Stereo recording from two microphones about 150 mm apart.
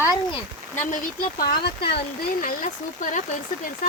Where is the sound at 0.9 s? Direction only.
75° left (ahead or behind); by 1.9 s 90° left.